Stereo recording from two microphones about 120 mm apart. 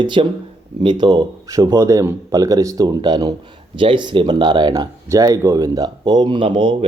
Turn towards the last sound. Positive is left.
turn(degrees=-45)  # may be behind; listen again after turning